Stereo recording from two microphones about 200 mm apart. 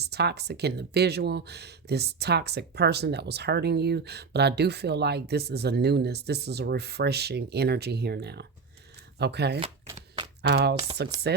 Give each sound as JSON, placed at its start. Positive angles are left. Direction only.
{"t": 0.0, "sound": "speech", "side_deg": -55}